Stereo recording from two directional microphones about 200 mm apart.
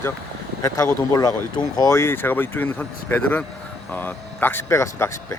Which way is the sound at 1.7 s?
15° left (ahead or behind).